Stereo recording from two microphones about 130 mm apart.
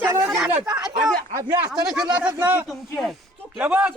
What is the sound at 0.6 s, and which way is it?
Speech, 30° right (ahead or behind).